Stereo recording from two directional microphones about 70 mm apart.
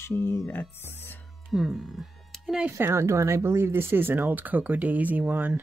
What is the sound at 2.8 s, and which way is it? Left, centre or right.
Speech, right.